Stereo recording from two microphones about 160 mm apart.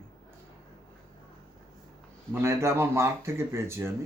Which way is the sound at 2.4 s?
15° right (ahead or behind).